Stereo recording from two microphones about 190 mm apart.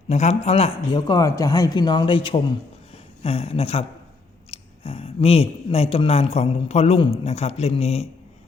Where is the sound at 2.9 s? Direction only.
30° left (ahead or behind).